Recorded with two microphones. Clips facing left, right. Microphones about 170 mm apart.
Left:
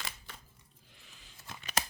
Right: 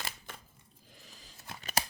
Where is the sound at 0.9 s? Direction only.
40° right (ahead or behind).